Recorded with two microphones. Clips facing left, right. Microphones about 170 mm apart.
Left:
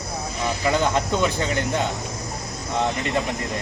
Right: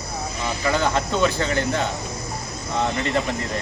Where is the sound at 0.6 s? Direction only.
20° left (ahead or behind).